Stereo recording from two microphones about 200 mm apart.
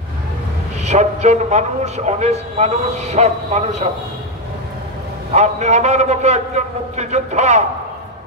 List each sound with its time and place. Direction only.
0.8 s a man's voice: 35° right (ahead or behind)
5.3 s a man's voice: 35° right (ahead or behind)